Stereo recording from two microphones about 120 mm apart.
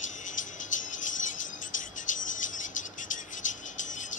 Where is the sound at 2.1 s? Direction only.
90° left.